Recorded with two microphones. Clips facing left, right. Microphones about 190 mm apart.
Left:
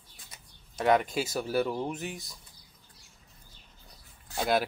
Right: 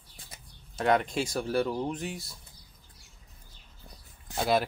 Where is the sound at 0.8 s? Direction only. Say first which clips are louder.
Left 1 dB; centre (ahead or behind).